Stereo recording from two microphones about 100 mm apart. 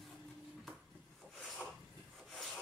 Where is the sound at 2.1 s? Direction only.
5° left (ahead or behind).